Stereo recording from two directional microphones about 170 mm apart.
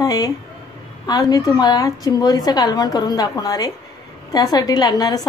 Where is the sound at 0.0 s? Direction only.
20° left (ahead or behind).